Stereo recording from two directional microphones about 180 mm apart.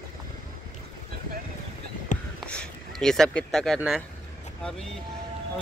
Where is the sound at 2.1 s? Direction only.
45° left (ahead or behind).